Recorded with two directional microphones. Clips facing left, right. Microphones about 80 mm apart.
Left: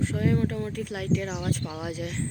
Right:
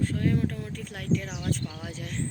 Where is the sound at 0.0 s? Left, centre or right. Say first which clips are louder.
Left 1 dB; centre.